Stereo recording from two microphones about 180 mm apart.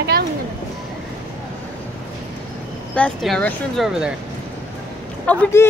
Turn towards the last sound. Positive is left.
turn(degrees=10)  # may be behind; listen again after turning